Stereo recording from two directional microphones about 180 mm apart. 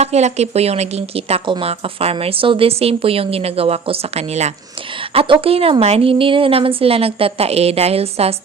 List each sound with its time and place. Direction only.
0.0 s speech: 40° right (ahead or behind)